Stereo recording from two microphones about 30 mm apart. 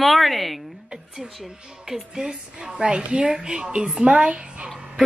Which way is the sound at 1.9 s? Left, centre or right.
Right.